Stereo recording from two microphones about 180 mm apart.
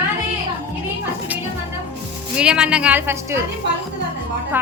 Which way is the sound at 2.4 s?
5° right (ahead or behind).